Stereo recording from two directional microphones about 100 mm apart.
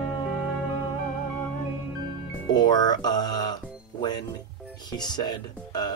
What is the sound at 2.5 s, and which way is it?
Speech, 45° left (ahead or behind).